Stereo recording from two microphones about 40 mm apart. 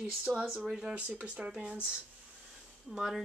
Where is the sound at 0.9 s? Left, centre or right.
Right.